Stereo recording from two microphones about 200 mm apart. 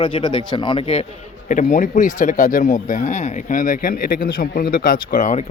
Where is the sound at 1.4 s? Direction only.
40° left (ahead or behind).